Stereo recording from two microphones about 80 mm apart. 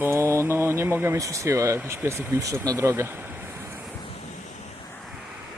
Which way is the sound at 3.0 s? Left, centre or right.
Right.